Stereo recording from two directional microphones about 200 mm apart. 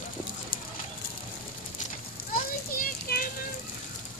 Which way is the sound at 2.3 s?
45° left (ahead or behind).